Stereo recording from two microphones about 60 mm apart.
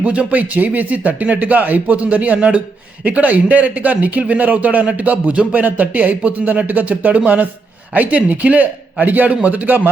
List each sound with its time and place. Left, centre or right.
0.0 s a man's voice: right